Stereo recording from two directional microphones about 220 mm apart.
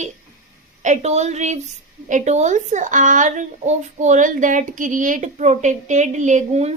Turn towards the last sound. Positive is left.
turn(degrees=-30)  # may be behind; listen again after turning